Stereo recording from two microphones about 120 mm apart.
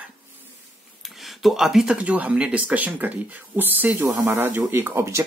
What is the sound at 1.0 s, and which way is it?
Speech, centre (ahead or behind).